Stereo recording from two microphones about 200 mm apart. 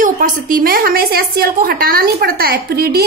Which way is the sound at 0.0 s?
45° right (ahead or behind).